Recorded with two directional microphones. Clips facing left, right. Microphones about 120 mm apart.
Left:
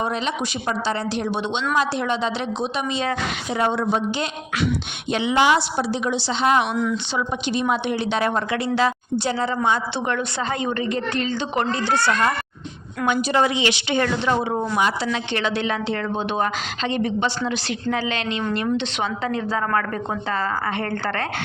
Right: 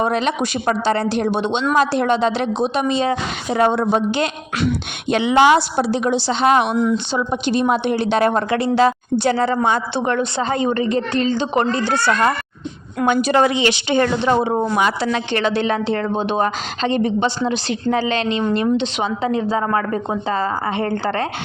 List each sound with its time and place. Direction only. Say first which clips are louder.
0.0 s speech: right 5 dB; 60° right (ahead or behind)
1.1 s a woman's voice: right 5 dB; 50° right (ahead or behind)
6.7 s a woman's voice: right 5 dB; 30° right (ahead or behind)
7.3 s a woman's voice: right 5 dB; 40° right (ahead or behind)
9.2 s speech: right 5 dB; 60° right (ahead or behind)
10.3 s a woman's voice: right 5 dB; 35° right (ahead or behind)
13.2 s speech: right 4 dB; 60° right (ahead or behind)
13.7 s a woman's voice: right 4 dB; 35° right (ahead or behind)
15.0 s a woman's voice: right 5 dB; 50° right (ahead or behind); by 21.2 s 20° right (ahead or behind)